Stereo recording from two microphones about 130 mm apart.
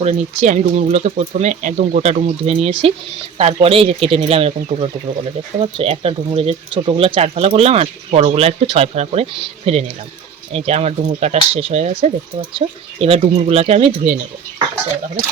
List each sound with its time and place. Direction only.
0.0 s speech: 60° right (ahead or behind)